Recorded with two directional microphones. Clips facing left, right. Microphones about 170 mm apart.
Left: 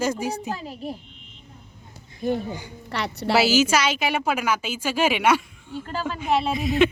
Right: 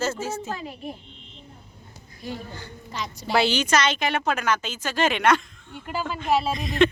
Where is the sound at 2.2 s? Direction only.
50° left (ahead or behind).